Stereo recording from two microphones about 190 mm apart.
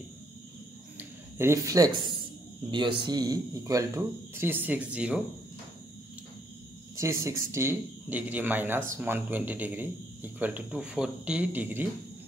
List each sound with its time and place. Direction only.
0.9 s a sound: 15° right (ahead or behind)
3.0 s speech: 20° right (ahead or behind)
7.0 s speech: 15° right (ahead or behind)